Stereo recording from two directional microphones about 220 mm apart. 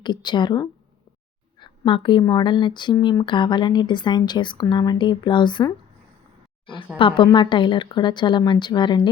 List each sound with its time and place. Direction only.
0.0 s speech: 20° left (ahead or behind)
7.0 s speech: 20° left (ahead or behind)